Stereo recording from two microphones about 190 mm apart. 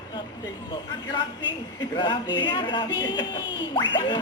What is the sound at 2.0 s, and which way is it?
Speech, 25° left (ahead or behind).